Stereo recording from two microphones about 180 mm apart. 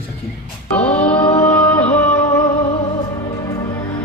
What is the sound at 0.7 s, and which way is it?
Speech, 10° left (ahead or behind).